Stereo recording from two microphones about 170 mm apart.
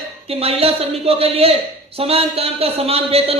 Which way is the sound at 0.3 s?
35° right (ahead or behind).